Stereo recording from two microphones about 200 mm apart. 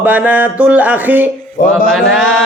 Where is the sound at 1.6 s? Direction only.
45° left (ahead or behind).